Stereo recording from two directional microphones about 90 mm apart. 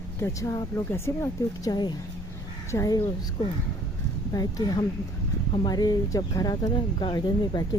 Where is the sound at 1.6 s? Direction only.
50° left (ahead or behind).